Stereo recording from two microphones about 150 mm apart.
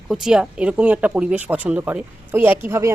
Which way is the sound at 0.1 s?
5° right (ahead or behind).